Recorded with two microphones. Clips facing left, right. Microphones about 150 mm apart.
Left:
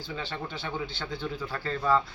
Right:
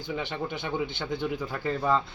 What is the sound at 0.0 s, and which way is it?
A woman's voice, 20° right (ahead or behind).